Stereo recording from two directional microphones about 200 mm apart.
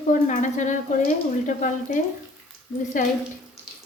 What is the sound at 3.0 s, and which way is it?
Speech, 40° left (ahead or behind).